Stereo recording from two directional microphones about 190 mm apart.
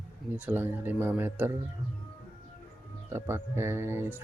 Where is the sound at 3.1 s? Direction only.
15° right (ahead or behind).